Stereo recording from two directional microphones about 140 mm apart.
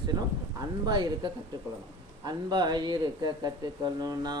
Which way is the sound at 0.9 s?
30° right (ahead or behind).